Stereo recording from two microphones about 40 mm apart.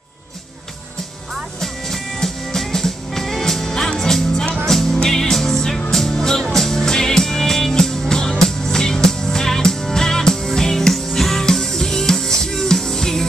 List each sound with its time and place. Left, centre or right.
1.6 s music: centre